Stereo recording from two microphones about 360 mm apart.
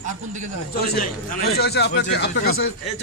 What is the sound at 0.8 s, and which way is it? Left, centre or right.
A man's voice, left.